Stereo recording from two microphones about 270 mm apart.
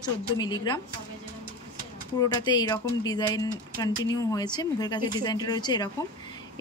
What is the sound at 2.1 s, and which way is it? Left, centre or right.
A woman's voice, centre.